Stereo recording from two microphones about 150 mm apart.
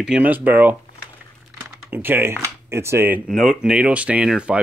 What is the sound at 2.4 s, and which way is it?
Speech, 20° right (ahead or behind).